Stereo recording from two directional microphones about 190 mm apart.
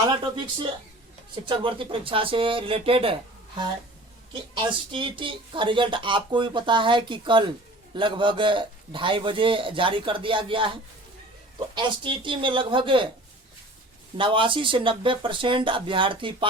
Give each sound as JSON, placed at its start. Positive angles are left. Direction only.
{"t": 0.0, "sound": "speech", "side_deg": -25}
{"t": 4.5, "sound": "speech", "side_deg": -25}
{"t": 14.2, "sound": "speech", "side_deg": -25}